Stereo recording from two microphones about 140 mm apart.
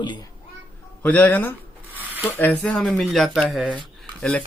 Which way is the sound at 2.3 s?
10° left (ahead or behind).